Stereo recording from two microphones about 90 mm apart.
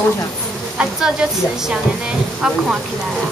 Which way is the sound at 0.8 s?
10° right (ahead or behind).